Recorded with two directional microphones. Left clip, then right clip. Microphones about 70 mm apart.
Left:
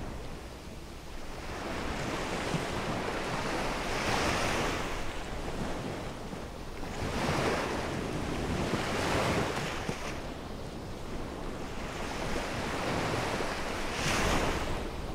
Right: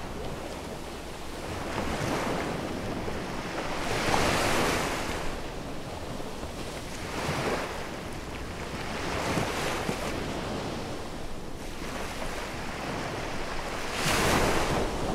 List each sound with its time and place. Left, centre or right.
3.9 s waves: centre
7.2 s waves: centre
9.6 s waves: centre
13.9 s waves: centre